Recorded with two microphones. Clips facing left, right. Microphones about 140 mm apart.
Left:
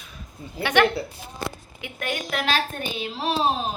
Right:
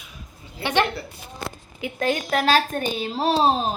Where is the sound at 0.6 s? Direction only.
25° right (ahead or behind).